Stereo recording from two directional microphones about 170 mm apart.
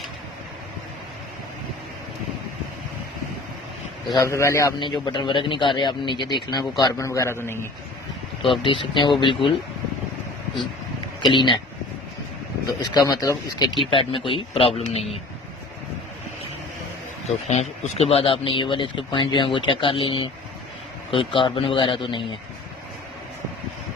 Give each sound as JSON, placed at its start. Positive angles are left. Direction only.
{"t": 4.1, "sound": "a man's voice", "side_deg": 20}
{"t": 8.6, "sound": "speech", "side_deg": 30}
{"t": 11.2, "sound": "speech", "side_deg": 25}
{"t": 12.6, "sound": "a man's voice", "side_deg": 25}
{"t": 17.2, "sound": "a man's voice", "side_deg": 40}